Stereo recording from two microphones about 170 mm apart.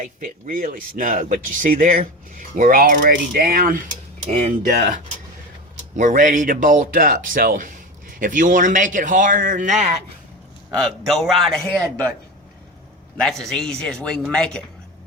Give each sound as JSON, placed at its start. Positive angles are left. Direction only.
{"t": 0.0, "sound": "speech", "side_deg": -50}
{"t": 4.3, "sound": "speech", "side_deg": -40}
{"t": 6.0, "sound": "speech", "side_deg": -50}
{"t": 10.7, "sound": "a man's voice", "side_deg": 0}
{"t": 13.2, "sound": "a man's voice", "side_deg": 0}